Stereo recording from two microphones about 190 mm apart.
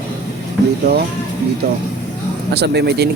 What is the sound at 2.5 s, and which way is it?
Speech, 60° right (ahead or behind).